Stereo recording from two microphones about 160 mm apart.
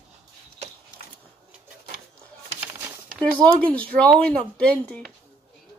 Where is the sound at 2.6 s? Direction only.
15° right (ahead or behind).